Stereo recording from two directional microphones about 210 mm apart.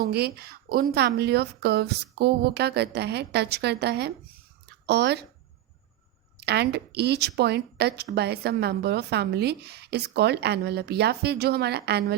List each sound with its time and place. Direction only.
0.0 s speech: 50° right (ahead or behind)
4.6 s a sound: 50° right (ahead or behind)
6.3 s speech: 50° right (ahead or behind)